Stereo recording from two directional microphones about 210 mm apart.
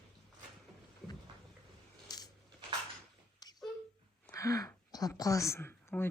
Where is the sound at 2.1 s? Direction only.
20° left (ahead or behind).